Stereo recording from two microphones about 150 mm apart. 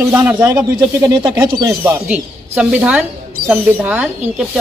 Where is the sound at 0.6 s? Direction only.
25° right (ahead or behind).